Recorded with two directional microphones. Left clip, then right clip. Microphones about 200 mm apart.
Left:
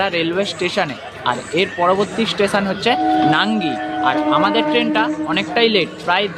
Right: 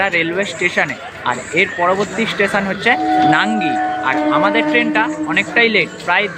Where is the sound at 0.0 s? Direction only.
15° left (ahead or behind).